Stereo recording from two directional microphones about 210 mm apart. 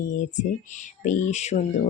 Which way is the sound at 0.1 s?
35° left (ahead or behind).